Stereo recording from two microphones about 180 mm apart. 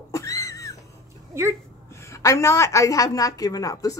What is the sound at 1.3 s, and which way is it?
Speech, 15° right (ahead or behind).